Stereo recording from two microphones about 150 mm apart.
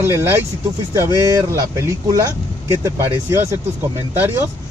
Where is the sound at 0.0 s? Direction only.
15° right (ahead or behind).